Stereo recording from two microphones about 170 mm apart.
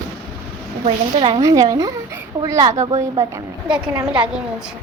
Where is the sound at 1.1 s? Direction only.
35° right (ahead or behind).